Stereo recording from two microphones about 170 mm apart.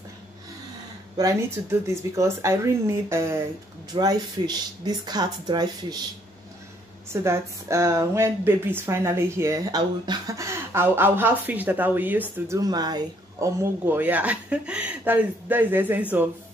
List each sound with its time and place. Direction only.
1.1 s speech: 20° right (ahead or behind)
7.1 s speech: 15° right (ahead or behind)